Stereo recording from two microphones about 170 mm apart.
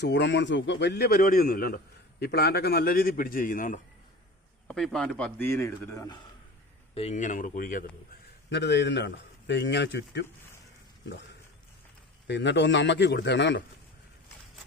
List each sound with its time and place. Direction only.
0.0 s a man's voice: 90° left; by 3.8 s 50° left (ahead or behind)
4.7 s a man's voice: 5° left (ahead or behind)
6.9 s speech: 40° left (ahead or behind)
8.4 s a man's voice: 90° left
12.3 s a man's voice: 90° left